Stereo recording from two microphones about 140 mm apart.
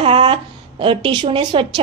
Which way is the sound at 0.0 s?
40° right (ahead or behind).